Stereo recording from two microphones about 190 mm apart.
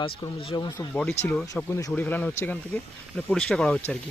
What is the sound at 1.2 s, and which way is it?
Speech, 10° left (ahead or behind).